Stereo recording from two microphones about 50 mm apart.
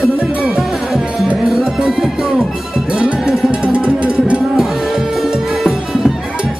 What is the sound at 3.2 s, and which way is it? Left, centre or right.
Music, centre.